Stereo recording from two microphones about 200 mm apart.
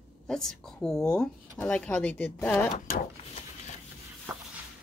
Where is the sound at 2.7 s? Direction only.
45° left (ahead or behind).